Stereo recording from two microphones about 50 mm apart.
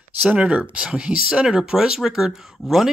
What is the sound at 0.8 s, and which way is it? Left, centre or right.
Speech, centre.